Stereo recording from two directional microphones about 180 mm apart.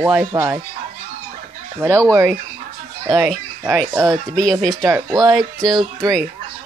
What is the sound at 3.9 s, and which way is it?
Speech, 20° right (ahead or behind).